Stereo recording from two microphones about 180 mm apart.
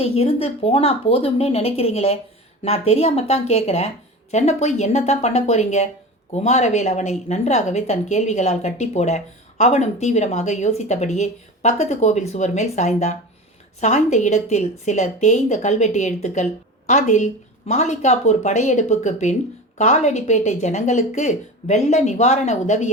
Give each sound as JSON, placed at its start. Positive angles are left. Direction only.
{"t": 0.0, "sound": "a woman's voice", "side_deg": 35}